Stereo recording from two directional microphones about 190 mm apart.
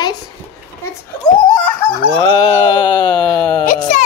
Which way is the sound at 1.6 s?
10° left (ahead or behind).